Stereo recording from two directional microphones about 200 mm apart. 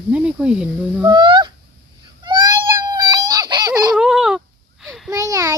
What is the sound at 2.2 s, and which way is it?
Baby cry, 20° right (ahead or behind).